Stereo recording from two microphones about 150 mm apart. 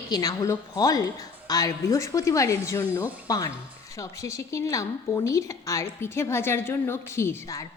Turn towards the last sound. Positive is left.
turn(degrees=20)  # may be behind; listen again after turning